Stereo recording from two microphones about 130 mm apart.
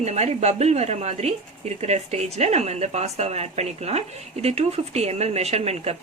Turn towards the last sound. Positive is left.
turn(degrees=-55)  # may be behind; listen again after turning